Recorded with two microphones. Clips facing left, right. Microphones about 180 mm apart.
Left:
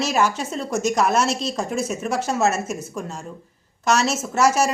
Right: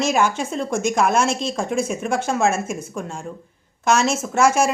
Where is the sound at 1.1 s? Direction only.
50° right (ahead or behind).